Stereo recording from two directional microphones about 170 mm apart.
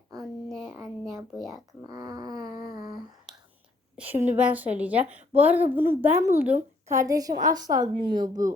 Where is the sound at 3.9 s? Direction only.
10° right (ahead or behind).